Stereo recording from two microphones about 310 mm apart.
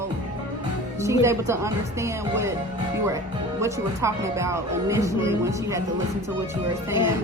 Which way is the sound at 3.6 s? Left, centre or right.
Centre.